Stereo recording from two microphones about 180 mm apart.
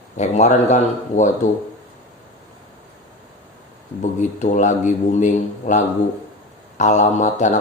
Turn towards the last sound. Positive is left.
turn(degrees=40)  # may be behind; listen again after turning